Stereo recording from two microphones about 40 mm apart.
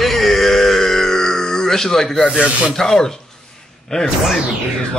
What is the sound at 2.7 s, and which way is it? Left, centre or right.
Speech, centre.